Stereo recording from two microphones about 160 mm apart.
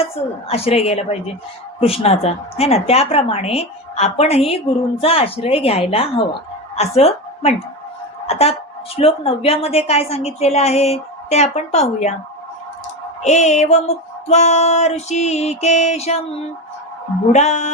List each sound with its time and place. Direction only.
0.4 s a woman's voice: 40° left (ahead or behind)
13.2 s music: 45° left (ahead or behind)
17.3 s music: 45° left (ahead or behind)